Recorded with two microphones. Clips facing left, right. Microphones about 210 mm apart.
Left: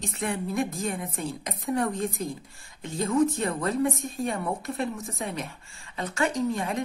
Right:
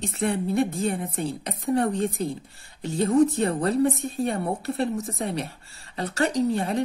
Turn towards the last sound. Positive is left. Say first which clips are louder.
# right 4 dB
turn(degrees=-35)  # may be behind; listen again after turning